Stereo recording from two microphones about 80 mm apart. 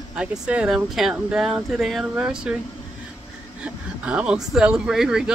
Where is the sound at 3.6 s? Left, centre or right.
Centre.